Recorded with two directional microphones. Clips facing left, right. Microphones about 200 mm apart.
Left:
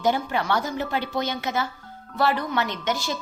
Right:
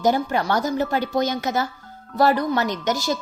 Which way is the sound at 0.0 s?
40° right (ahead or behind).